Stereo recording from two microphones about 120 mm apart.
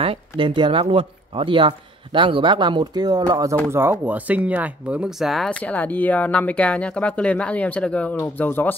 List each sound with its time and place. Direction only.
0.0 s speech: 50° right (ahead or behind); by 3.5 s 30° right (ahead or behind)
3.7 s speech: 20° right (ahead or behind); by 5.5 s centre (ahead or behind)
5.5 s speech: 10° left (ahead or behind)